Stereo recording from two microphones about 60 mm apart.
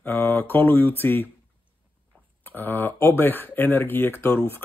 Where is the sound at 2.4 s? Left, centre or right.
Left.